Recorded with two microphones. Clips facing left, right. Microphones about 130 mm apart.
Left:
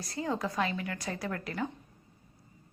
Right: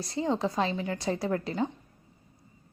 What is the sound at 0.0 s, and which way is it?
A woman's voice, 25° right (ahead or behind).